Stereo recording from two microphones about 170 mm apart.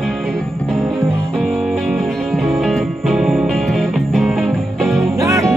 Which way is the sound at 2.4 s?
Centre (ahead or behind).